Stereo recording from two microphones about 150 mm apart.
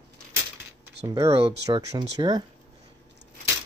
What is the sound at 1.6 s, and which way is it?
Speech, 25° right (ahead or behind).